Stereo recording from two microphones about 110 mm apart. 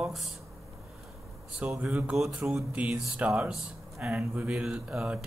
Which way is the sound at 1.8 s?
10° right (ahead or behind).